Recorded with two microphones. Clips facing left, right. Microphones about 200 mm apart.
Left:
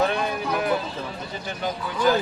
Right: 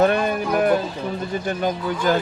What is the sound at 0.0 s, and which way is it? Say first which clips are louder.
Music: right 5 dB; 50° right (ahead or behind).